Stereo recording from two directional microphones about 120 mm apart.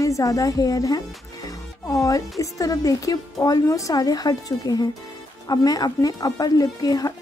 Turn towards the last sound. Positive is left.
turn(degrees=30)  # may be behind; listen again after turning